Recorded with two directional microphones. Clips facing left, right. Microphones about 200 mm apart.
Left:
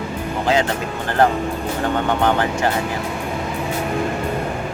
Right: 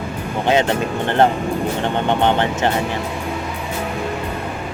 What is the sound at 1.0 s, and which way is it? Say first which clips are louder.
Speech: even; 25° right (ahead or behind).